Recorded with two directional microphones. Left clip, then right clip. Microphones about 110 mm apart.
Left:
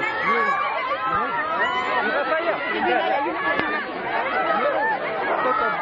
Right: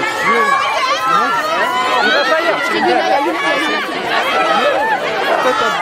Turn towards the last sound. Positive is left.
turn(degrees=-35)  # may be behind; listen again after turning